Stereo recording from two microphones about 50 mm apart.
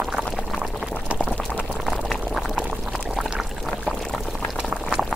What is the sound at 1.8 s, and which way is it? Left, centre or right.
Boiling, centre.